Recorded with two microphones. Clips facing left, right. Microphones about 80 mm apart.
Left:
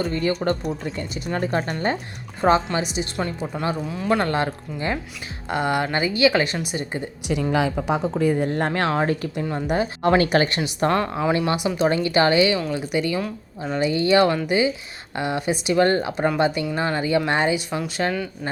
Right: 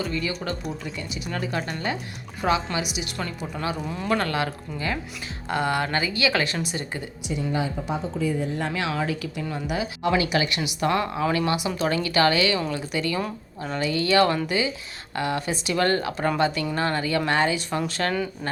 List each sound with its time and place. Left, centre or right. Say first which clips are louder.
0.0 s speech: left 5 dB; left
0.6 s speech: left 5 dB; centre
0.9 s speech: left 4 dB; left
7.3 s speech: left 5 dB; left
9.3 s speech: left 5 dB; left
9.7 s speech: left 5 dB; left
17.7 s speech: left 1 dB; centre